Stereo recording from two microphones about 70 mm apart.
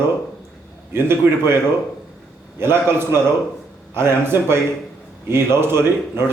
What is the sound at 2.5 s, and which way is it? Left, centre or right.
Speech, right.